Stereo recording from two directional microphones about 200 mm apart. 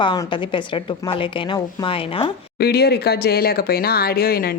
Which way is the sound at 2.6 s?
50° left (ahead or behind).